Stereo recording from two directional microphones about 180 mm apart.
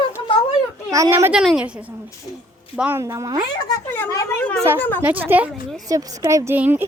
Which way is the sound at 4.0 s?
15° left (ahead or behind).